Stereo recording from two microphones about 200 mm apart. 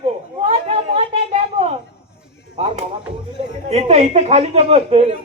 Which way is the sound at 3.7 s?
30° right (ahead or behind).